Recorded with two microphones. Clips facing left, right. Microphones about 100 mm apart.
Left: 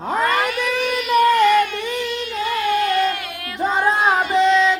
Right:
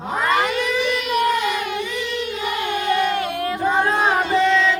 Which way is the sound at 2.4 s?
20° right (ahead or behind).